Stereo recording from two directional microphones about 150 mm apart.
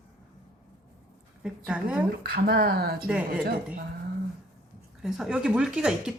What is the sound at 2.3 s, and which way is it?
Speech, 90° right.